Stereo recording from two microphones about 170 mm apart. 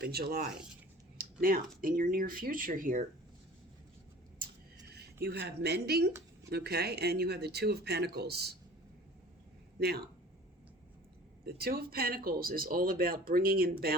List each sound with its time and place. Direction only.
0.0 s speech: 65° right (ahead or behind); by 3.1 s 50° right (ahead or behind)
5.2 s speech: 70° right (ahead or behind)
11.4 s speech: 65° right (ahead or behind)